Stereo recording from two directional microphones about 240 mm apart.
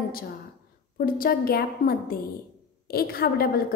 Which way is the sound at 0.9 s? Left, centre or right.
Left.